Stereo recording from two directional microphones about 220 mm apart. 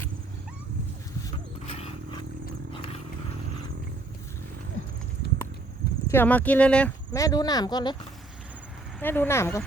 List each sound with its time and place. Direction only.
1.6 s horse: 25° left (ahead or behind)
2.7 s vehicle: 25° left (ahead or behind)
5.2 s walk: 50° left (ahead or behind)
6.1 s speech: 10° left (ahead or behind)
9.0 s speech: 10° left (ahead or behind)